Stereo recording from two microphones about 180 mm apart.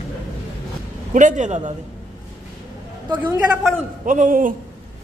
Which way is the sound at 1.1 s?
45° right (ahead or behind).